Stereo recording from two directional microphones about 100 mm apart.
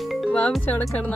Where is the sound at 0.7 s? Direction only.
15° left (ahead or behind).